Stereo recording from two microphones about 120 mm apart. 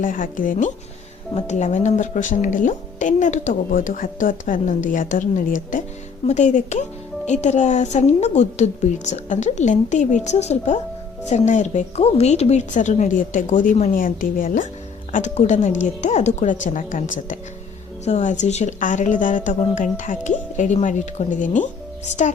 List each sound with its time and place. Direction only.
0.4 s a woman's voice: 90° left
1.4 s a woman's voice: 75° left (ahead or behind)
7.3 s a woman's voice: 75° left (ahead or behind)
11.3 s a woman's voice: 80° left
15.1 s a woman's voice: 80° left